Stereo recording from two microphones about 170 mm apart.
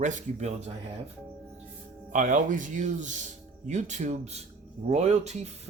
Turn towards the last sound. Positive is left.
turn(degrees=-40)  # may be behind; listen again after turning